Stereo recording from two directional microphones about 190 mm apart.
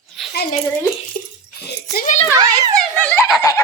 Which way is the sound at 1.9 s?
40° left (ahead or behind).